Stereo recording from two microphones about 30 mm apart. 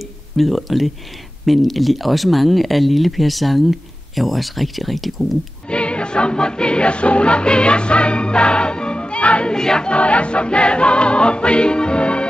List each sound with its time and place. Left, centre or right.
0.4 s speech: centre
5.7 s music: left
9.5 s choir: left
9.8 s music: left